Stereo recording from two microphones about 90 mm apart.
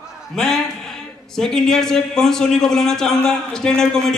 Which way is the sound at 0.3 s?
5° left (ahead or behind).